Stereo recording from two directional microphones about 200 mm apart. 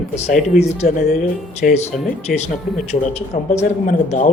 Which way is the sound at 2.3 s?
5° right (ahead or behind).